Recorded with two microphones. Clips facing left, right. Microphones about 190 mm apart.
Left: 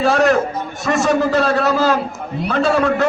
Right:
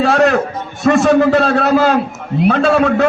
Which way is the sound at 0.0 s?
60° right (ahead or behind).